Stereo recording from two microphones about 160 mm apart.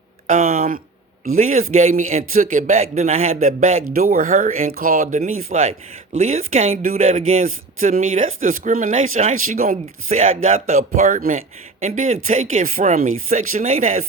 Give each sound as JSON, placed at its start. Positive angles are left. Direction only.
{"t": 0.3, "sound": "speech", "side_deg": -60}
{"t": 6.1, "sound": "speech", "side_deg": -40}
{"t": 6.8, "sound": "speech", "side_deg": -60}